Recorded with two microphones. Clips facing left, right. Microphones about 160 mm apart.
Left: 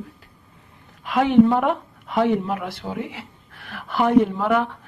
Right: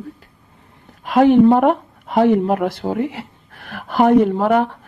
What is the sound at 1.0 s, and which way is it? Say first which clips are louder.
Speech: right 4 dB; 45° right (ahead or behind).